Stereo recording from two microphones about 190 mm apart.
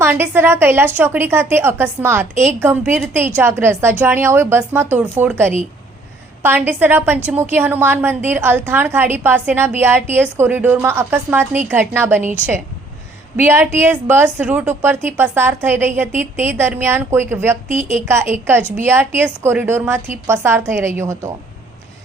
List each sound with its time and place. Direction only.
0.0 s a woman's voice: 10° right (ahead or behind)
17.7 s a woman's voice: 40° right (ahead or behind)
18.1 s a woman's voice: 15° right (ahead or behind)